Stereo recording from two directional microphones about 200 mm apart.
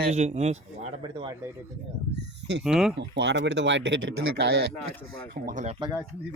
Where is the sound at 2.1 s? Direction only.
60° right (ahead or behind).